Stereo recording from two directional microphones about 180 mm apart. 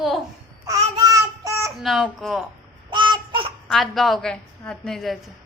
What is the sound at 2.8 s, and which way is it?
Babbling, 25° right (ahead or behind).